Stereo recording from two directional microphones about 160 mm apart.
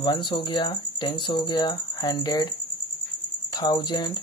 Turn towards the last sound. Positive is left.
turn(degrees=25)  # may be behind; listen again after turning